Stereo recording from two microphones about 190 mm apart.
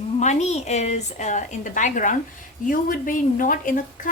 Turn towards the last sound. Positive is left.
turn(degrees=45)  # may be behind; listen again after turning